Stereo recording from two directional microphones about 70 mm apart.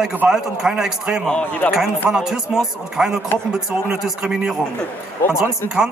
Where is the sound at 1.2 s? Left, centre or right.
Centre.